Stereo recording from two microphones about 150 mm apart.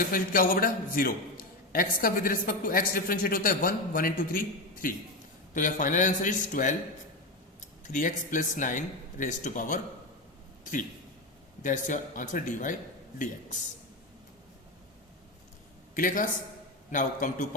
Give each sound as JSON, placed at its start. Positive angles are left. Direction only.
{"t": 0.1, "sound": "a man's voice", "side_deg": 70}
{"t": 16.0, "sound": "a man's voice", "side_deg": 60}